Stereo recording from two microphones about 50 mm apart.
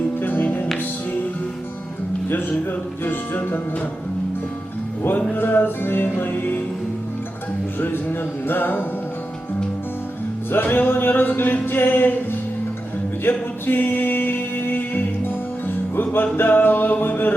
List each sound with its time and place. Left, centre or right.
0.2 s music: left
3.0 s music: left
5.3 s music: left
8.4 s music: left
10.5 s music: left